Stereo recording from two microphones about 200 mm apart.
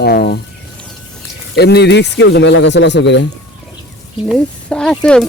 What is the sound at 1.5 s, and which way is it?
A man's voice, 55° left (ahead or behind).